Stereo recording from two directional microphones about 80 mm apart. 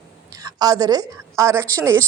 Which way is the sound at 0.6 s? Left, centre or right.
Right.